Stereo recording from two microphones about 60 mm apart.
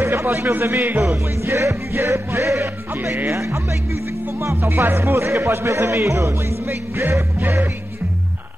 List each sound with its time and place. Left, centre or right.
0.0 s a man's voice: right
3.3 s speech: right
4.6 s speech: right
7.3 s music: right